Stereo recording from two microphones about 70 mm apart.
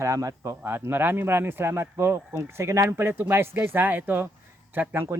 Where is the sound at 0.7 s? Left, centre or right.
Right.